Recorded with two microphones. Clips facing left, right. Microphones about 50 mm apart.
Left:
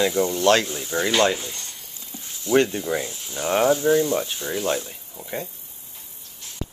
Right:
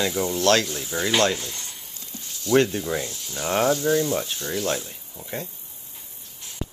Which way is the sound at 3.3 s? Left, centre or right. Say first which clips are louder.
Left 2 dB; centre.